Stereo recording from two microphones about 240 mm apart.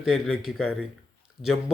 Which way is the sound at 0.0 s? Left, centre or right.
Centre.